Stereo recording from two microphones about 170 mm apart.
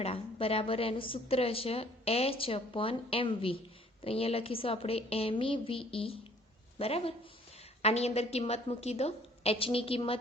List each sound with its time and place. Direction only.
0.0 s a woman's voice: 35° left (ahead or behind)